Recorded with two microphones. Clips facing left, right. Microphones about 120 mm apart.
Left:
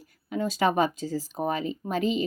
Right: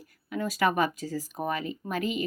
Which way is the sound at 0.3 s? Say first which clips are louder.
Left 2 dB; 25° left (ahead or behind).